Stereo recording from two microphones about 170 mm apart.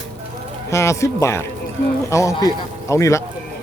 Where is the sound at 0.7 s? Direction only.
15° left (ahead or behind).